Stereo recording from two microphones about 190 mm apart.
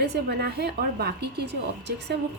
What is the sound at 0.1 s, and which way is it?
A woman's voice, 60° right (ahead or behind).